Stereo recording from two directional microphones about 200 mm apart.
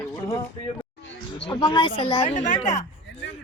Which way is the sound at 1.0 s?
65° left (ahead or behind).